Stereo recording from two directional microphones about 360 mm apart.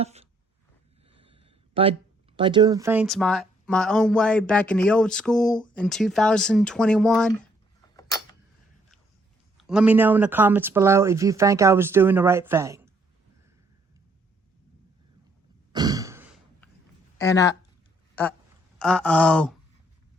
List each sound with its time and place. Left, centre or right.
0.0 s a sound: centre
1.0 s speech: centre
7.9 s a sound: centre
9.6 s speech: centre
15.7 s sigh: centre
17.2 s speech: centre
18.8 s speech: centre